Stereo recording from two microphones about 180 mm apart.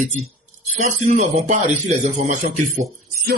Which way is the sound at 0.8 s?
40° right (ahead or behind).